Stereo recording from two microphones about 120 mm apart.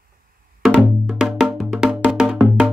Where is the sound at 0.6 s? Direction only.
5° right (ahead or behind).